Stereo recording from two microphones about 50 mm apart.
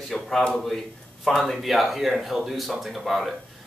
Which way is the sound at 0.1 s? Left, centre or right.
Centre.